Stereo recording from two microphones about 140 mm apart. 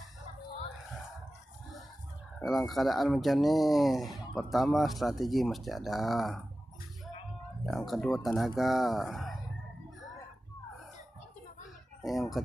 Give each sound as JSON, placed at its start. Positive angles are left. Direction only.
{"t": 2.4, "sound": "speech", "side_deg": 0}
{"t": 7.6, "sound": "speech", "side_deg": 0}
{"t": 12.0, "sound": "speech", "side_deg": 0}